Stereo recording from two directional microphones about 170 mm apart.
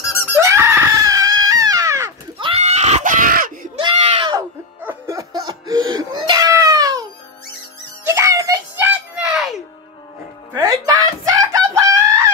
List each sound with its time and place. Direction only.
0.4 s screaming: 15° right (ahead or behind); by 3.5 s 55° right (ahead or behind)
3.7 s a sound: 30° right (ahead or behind)
4.8 s baby cry: 20° right (ahead or behind)
8.0 s music: 15° right (ahead or behind)
10.5 s music: 20° right (ahead or behind)